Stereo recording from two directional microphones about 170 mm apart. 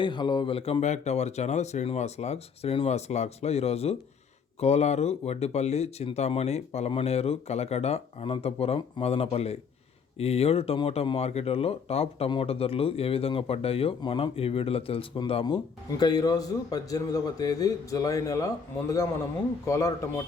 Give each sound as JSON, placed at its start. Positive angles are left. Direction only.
{"t": 0.0, "sound": "speech", "side_deg": 25}